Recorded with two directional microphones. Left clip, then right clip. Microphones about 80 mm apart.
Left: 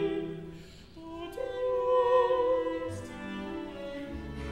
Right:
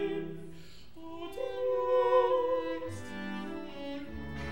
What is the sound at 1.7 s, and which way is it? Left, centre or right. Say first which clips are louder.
Music: left 2 dB; centre.